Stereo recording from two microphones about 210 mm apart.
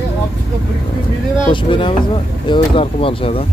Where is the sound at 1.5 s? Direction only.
25° left (ahead or behind).